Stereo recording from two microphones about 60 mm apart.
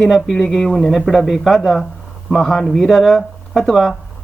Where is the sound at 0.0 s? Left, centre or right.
Centre.